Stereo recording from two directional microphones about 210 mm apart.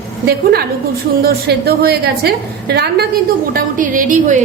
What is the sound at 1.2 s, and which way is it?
A woman's voice, 45° right (ahead or behind).